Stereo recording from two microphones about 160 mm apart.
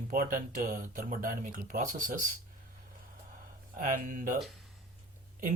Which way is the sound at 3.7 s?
60° right (ahead or behind).